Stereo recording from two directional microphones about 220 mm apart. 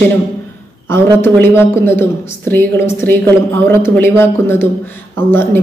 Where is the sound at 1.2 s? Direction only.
10° left (ahead or behind).